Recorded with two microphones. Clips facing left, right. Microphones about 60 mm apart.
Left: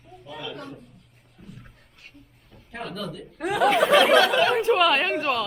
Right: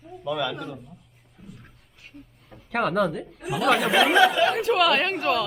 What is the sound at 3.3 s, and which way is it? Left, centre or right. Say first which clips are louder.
Speech: left 7 dB; left.